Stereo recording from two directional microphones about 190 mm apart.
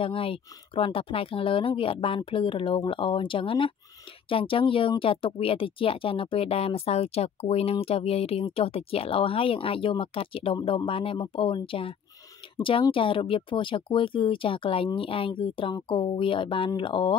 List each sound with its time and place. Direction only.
0.0 s speech: 30° left (ahead or behind)